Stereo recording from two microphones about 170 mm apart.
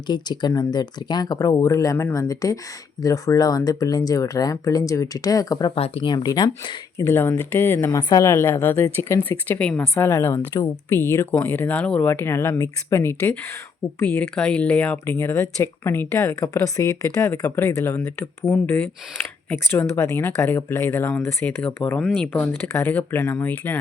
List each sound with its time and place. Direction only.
0.1 s speech: 25° left (ahead or behind)
7.1 s a woman's voice: 15° left (ahead or behind)